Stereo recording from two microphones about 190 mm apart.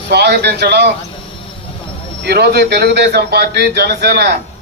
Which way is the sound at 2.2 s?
60° right (ahead or behind).